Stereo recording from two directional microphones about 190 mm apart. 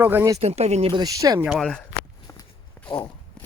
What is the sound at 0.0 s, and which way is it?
Speech, 10° right (ahead or behind).